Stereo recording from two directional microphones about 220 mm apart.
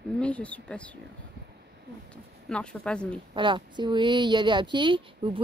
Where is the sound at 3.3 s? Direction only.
20° right (ahead or behind).